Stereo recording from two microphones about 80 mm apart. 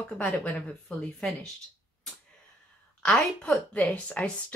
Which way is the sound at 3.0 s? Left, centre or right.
Centre.